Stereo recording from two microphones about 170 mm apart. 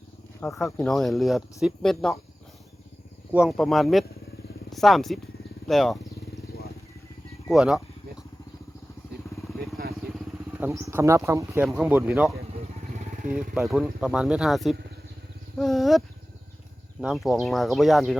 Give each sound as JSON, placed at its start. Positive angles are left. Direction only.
{"t": 0.3, "sound": "speech", "side_deg": 5}
{"t": 3.3, "sound": "speech", "side_deg": 0}
{"t": 7.4, "sound": "speech", "side_deg": -5}
{"t": 10.3, "sound": "speech", "side_deg": -15}
{"t": 13.3, "sound": "speech", "side_deg": -5}
{"t": 15.5, "sound": "a sound", "side_deg": 0}
{"t": 17.0, "sound": "speech", "side_deg": -5}